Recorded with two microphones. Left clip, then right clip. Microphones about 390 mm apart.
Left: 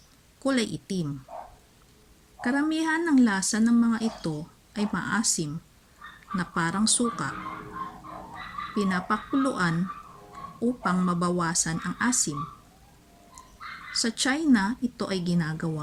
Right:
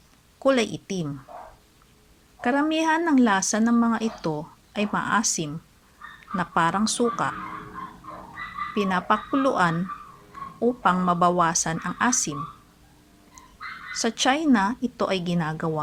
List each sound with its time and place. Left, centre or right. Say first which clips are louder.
0.4 s speech: right 6 dB; centre
2.4 s a woman's voice: right 4 dB; centre
8.7 s a woman's voice: right 5 dB; centre
10.8 s a woman's voice: right 9 dB; centre
13.9 s a woman's voice: right 4 dB; centre